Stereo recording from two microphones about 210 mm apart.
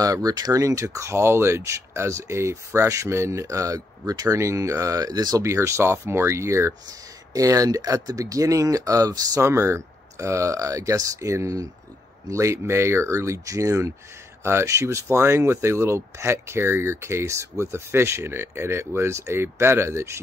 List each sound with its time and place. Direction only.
0.0 s speech: 15° right (ahead or behind)